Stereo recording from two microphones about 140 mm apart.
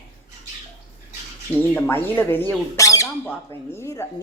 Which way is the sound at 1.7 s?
15° left (ahead or behind).